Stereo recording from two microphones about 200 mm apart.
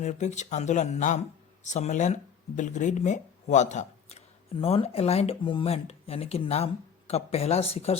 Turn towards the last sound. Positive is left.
turn(degrees=30)  # may be behind; listen again after turning